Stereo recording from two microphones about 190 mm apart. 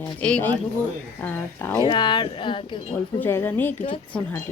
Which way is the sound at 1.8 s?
25° left (ahead or behind).